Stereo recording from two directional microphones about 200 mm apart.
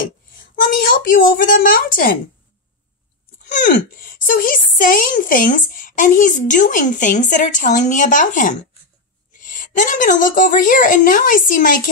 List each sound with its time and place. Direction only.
0.3 s a woman's voice: 45° left (ahead or behind)
3.4 s speech: 40° left (ahead or behind)